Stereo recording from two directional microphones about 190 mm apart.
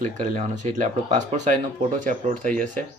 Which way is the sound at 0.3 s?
40° right (ahead or behind).